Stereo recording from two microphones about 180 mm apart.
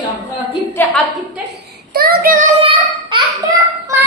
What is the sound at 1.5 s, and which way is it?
Child singing, 55° right (ahead or behind).